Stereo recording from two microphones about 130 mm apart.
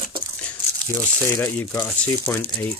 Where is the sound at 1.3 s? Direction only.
20° left (ahead or behind).